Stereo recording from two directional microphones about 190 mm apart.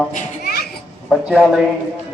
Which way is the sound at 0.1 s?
55° left (ahead or behind).